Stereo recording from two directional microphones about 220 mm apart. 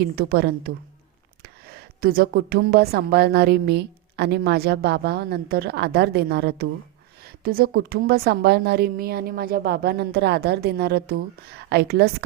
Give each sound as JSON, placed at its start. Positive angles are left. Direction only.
{"t": 0.0, "sound": "a woman's voice", "side_deg": -45}